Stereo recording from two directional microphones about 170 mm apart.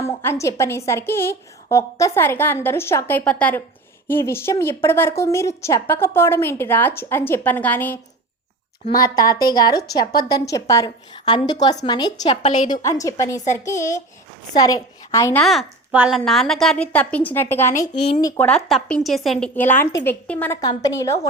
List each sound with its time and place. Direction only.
0.0 s a woman's voice: 15° left (ahead or behind)
9.0 s a woman's voice: 20° left (ahead or behind)
12.4 s a woman's voice: 45° left (ahead or behind)
12.7 s a woman's voice: 20° left (ahead or behind)
15.4 s a woman's voice: centre (ahead or behind); by 18.4 s 20° left (ahead or behind)
18.4 s a woman's voice: 5° left (ahead or behind)
20.6 s a woman's voice: 20° left (ahead or behind)